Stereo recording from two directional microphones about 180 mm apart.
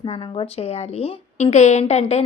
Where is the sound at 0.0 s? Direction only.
30° left (ahead or behind).